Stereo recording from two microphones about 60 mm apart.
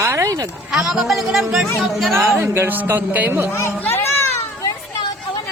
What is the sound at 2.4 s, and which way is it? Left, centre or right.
A man's voice, right.